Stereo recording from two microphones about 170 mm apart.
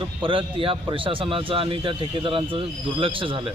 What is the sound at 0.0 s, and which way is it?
A man's voice, 30° right (ahead or behind).